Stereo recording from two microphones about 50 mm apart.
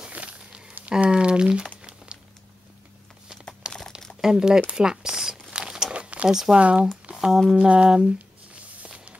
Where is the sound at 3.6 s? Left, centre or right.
Centre.